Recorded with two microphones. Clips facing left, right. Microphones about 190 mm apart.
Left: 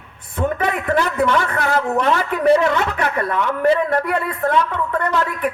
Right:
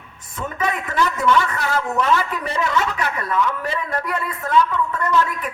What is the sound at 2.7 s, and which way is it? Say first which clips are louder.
Speech: left 2 dB; 55° left (ahead or behind).